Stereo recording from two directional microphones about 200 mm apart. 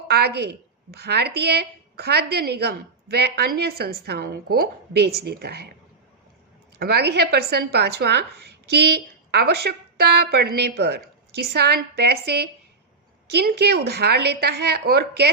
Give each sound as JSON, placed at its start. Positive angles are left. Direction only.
{"t": 0.1, "sound": "a sound", "side_deg": -55}
{"t": 0.9, "sound": "a woman's voice", "side_deg": -55}
{"t": 6.7, "sound": "a woman's voice", "side_deg": -50}